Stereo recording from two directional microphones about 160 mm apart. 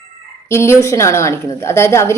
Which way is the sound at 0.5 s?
15° left (ahead or behind).